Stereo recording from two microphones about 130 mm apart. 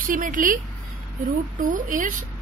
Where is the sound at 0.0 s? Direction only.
90° right.